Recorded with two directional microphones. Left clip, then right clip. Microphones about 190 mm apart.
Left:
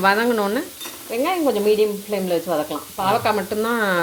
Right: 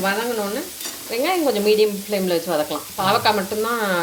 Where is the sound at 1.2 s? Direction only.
10° left (ahead or behind).